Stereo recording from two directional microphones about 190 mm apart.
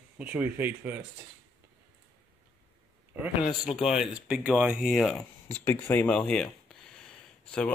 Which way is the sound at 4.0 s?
5° right (ahead or behind).